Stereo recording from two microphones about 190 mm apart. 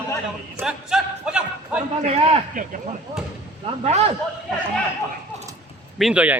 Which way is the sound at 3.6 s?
35° right (ahead or behind).